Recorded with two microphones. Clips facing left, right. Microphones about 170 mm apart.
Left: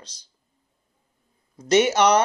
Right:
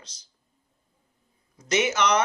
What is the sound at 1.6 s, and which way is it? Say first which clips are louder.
Speech: left 6 dB; 35° left (ahead or behind).